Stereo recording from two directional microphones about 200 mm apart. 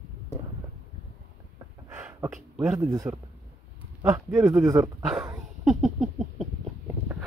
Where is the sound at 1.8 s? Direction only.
10° right (ahead or behind).